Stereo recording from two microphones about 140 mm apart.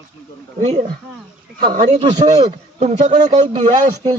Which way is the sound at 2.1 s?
30° right (ahead or behind).